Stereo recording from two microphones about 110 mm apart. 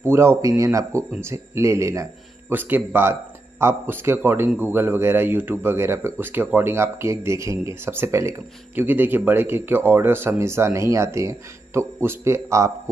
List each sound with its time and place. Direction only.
0.0 s speech: 25° right (ahead or behind)